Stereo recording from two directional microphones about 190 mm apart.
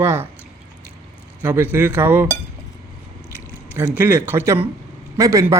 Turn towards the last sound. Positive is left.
turn(degrees=-15)  # may be behind; listen again after turning